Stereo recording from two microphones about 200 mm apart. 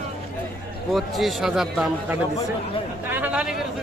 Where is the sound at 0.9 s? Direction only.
Centre (ahead or behind).